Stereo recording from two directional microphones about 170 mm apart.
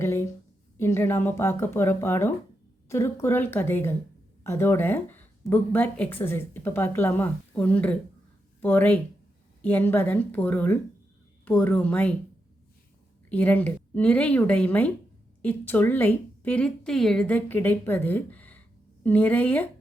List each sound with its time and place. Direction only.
0.0 s a sound: 15° left (ahead or behind)
0.8 s speech: 15° left (ahead or behind)
13.3 s speech: 10° left (ahead or behind)